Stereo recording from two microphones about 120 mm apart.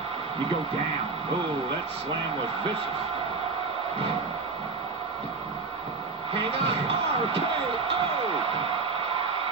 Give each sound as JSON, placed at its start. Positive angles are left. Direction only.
{"t": 6.3, "sound": "slam", "side_deg": -50}